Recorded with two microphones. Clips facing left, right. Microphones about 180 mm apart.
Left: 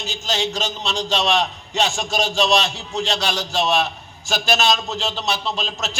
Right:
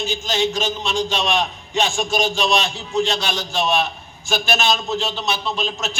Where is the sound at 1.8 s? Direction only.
40° left (ahead or behind).